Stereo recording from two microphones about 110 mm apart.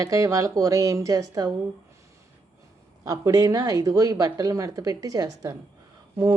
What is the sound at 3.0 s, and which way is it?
Speech, 30° right (ahead or behind).